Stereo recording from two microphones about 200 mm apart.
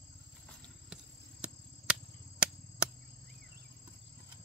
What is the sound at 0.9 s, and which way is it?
Cricket, 5° right (ahead or behind).